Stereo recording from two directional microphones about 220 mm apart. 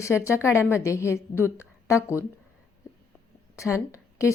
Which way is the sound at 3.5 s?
15° left (ahead or behind).